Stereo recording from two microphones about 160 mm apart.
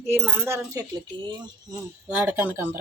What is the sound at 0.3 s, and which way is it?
A woman's voice, 15° right (ahead or behind).